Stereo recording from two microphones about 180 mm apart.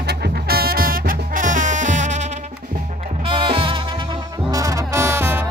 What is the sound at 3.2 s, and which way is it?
Music, 30° right (ahead or behind).